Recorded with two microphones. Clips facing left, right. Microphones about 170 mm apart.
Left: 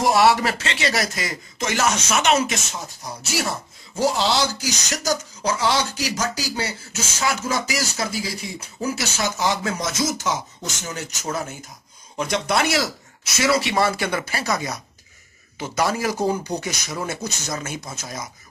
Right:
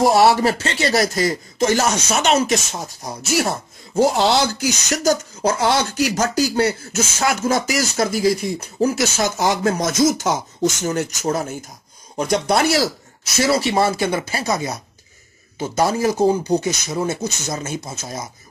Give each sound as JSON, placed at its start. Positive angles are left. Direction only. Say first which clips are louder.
{"t": 0.0, "sound": "speech", "louder": "right 3 dB", "side_deg": -35}
{"t": 4.0, "sound": "speech", "louder": "right 5 dB", "side_deg": -55}